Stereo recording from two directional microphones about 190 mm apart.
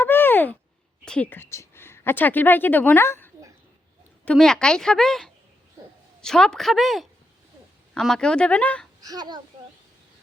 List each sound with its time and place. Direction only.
0.0 s a sound: 10° left (ahead or behind)
1.0 s a woman's voice: 5° left (ahead or behind)
9.0 s speech: 20° right (ahead or behind)